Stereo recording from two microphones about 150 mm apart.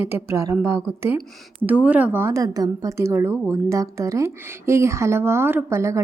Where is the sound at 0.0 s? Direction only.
15° right (ahead or behind).